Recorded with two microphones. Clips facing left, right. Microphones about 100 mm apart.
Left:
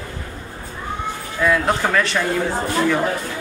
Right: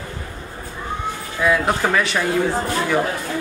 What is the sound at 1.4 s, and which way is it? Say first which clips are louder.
Speech: even; 5° right (ahead or behind).